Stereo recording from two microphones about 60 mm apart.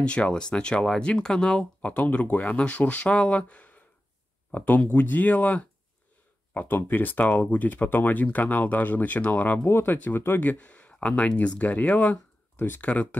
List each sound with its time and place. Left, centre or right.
0.0 s speech: centre
1.8 s speech: left
9.7 s speech: left